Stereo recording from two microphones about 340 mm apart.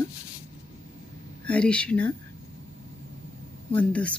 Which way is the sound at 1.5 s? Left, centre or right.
Centre.